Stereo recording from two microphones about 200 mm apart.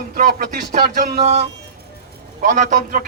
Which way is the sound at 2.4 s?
40° right (ahead or behind).